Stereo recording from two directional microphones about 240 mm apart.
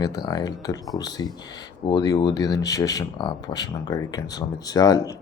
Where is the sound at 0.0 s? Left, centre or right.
Centre.